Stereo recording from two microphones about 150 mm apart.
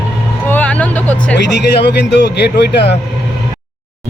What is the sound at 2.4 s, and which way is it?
Speech, 90° left.